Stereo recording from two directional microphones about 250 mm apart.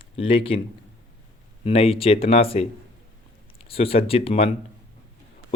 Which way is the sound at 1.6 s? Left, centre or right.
Left.